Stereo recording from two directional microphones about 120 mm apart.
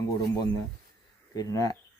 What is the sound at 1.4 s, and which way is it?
Speech, 30° left (ahead or behind).